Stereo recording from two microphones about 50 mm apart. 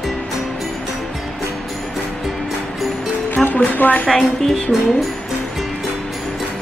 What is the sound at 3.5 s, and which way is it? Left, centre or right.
Speech, left.